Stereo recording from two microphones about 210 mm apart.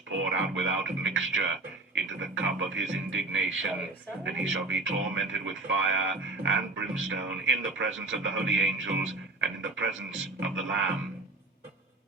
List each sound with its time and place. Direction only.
0.3 s speech: 65° right (ahead or behind)